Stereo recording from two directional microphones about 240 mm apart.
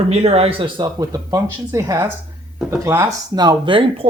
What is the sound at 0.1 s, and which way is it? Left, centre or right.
Speech, right.